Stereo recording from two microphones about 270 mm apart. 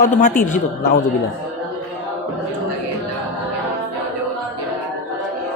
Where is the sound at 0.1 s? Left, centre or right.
Left.